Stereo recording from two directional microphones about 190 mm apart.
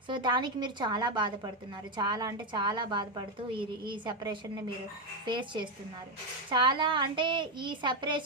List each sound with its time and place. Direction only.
0.1 s a woman's voice: 25° right (ahead or behind)